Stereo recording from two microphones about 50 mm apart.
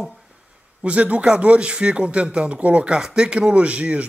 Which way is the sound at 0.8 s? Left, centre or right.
Right.